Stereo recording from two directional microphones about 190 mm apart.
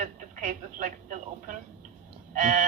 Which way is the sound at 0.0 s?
40° right (ahead or behind).